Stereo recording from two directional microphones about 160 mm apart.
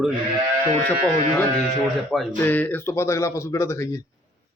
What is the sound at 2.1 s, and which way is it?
Speech, centre (ahead or behind).